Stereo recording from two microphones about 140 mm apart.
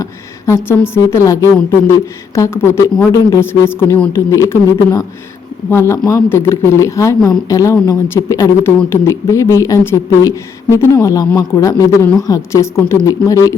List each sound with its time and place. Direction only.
0.0 s speech: 20° left (ahead or behind)